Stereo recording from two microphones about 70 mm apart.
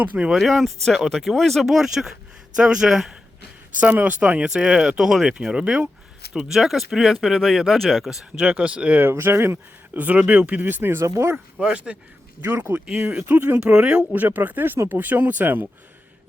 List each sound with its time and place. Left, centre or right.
0.0 s speech: right
0.3 s speech: centre
3.8 s speech: centre
9.0 s speech: right
11.0 s speech: right
11.6 s speech: centre
12.4 s speech: right
12.7 s speech: centre
13.2 s speech: right
13.6 s speech: centre
14.1 s speech: right